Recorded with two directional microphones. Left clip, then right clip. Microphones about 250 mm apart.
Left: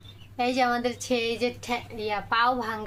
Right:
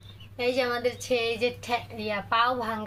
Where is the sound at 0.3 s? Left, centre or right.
Left.